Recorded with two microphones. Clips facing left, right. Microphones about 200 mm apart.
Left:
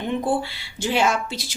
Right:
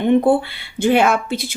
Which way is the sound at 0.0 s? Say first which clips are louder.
Right 9 dB; 60° right (ahead or behind).